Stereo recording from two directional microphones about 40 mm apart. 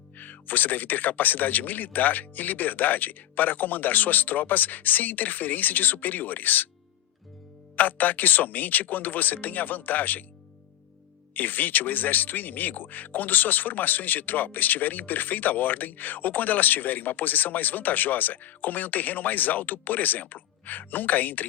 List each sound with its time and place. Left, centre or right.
0.2 s speech: left
7.8 s speech: left
11.3 s speech: left